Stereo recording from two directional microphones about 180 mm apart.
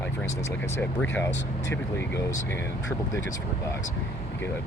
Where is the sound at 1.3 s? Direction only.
80° left.